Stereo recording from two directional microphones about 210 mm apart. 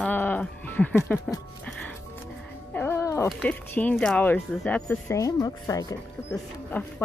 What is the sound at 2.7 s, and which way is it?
Music, 10° left (ahead or behind).